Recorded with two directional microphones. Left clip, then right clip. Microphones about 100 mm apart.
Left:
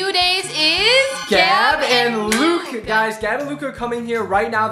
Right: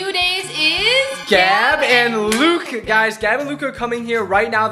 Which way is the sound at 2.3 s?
20° right (ahead or behind).